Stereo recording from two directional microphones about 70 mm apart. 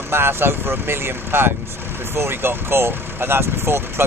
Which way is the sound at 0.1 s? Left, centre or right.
Right.